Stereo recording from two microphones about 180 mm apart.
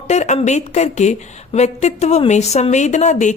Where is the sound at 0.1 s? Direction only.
40° left (ahead or behind).